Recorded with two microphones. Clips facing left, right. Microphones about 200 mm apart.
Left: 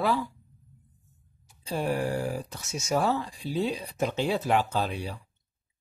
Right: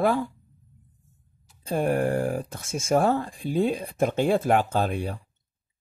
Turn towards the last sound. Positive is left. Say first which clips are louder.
# right 4 dB
turn(degrees=-50)  # may be behind; listen again after turning